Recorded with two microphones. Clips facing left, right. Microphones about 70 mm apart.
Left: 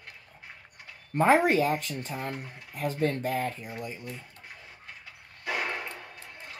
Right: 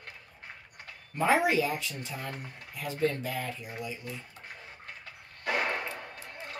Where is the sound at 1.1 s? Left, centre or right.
Left.